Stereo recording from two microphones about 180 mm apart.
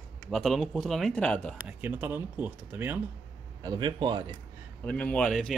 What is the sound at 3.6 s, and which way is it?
Speech, 25° right (ahead or behind).